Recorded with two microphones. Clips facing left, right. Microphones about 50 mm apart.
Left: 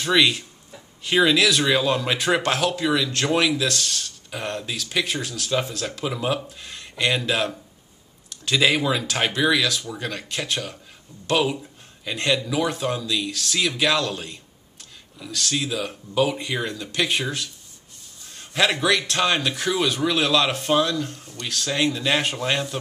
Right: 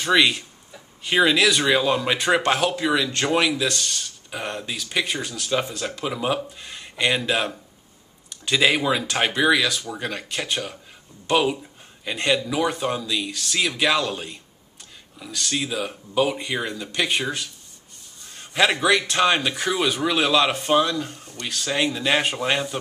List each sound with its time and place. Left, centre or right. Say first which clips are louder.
0.0 s speech: right 1 dB; centre